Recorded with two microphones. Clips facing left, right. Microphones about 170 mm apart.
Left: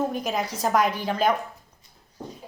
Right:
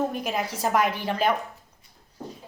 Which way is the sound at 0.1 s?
5° right (ahead or behind).